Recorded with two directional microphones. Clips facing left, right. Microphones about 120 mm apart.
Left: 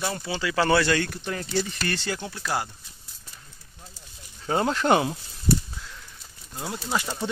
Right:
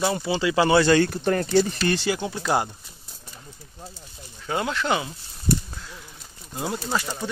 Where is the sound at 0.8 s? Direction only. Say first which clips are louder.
Right 6 dB; 30° right (ahead or behind).